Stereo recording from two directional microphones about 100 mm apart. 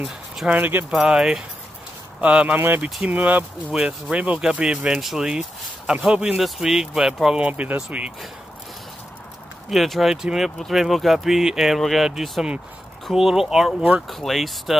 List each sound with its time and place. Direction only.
0.5 s speech: 15° right (ahead or behind)
0.9 s speech: 5° right (ahead or behind)
9.7 s speech: centre (ahead or behind)